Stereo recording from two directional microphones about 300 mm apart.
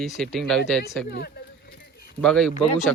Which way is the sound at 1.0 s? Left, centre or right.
Left.